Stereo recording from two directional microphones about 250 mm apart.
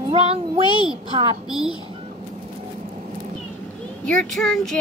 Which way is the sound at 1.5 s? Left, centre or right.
Centre.